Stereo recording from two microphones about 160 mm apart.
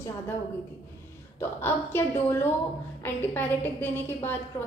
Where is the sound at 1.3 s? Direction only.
15° left (ahead or behind).